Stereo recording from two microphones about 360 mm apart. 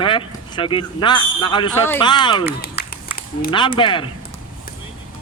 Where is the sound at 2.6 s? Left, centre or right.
Left.